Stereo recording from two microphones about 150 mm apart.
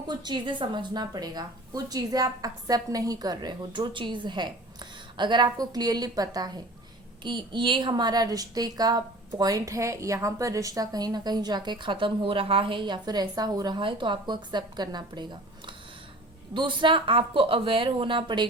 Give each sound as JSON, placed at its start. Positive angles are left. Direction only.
{"t": 0.1, "sound": "a woman's voice", "side_deg": -30}